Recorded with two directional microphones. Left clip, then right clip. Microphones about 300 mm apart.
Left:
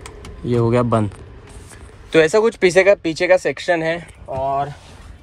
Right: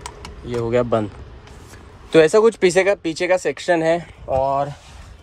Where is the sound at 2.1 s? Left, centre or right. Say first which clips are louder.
Right 1 dB; centre.